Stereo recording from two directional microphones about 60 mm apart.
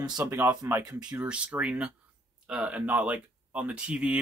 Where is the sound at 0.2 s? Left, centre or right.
Right.